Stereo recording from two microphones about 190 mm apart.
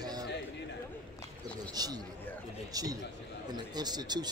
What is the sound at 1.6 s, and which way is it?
A man's voice, 20° right (ahead or behind).